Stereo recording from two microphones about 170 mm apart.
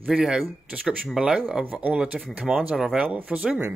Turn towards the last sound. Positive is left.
turn(degrees=-10)  # may be behind; listen again after turning